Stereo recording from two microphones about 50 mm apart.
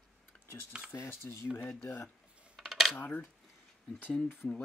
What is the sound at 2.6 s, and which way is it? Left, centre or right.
Coin, centre.